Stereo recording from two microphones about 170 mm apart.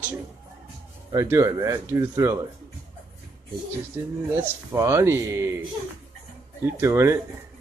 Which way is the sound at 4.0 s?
20° right (ahead or behind).